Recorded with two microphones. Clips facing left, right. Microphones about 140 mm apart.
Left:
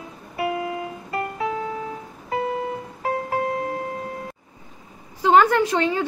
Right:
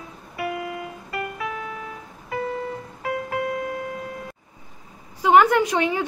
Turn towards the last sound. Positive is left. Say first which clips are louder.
# left 1 dB
turn(degrees=-15)  # may be behind; listen again after turning